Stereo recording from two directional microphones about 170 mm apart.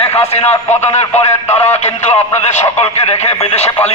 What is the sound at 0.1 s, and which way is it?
Speech, 40° left (ahead or behind).